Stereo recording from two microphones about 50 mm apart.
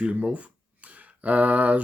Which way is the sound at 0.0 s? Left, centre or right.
Right.